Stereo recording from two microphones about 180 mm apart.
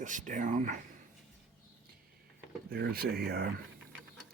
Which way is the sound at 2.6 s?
60° right (ahead or behind).